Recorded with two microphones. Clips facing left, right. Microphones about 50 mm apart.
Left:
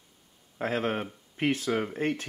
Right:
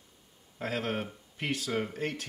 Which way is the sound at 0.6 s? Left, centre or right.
Left.